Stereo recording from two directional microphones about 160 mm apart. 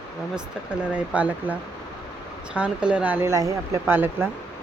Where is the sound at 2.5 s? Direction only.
5° right (ahead or behind).